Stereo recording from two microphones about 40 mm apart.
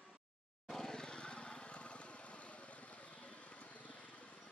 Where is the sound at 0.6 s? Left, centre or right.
Centre; by 3.9 s left.